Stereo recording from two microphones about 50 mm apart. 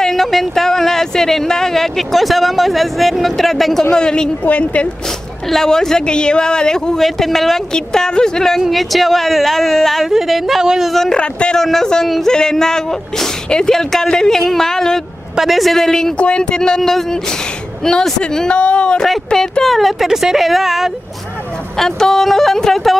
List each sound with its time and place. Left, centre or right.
0.0 s speech: centre
3.9 s speech: centre
4.5 s speech: left
5.5 s speech: centre
7.0 s speech: centre
7.7 s speech: centre
10.9 s speech: centre
11.1 s speech: left
11.5 s speech: centre
15.3 s speech: centre
16.2 s speech: centre
21.7 s speech: centre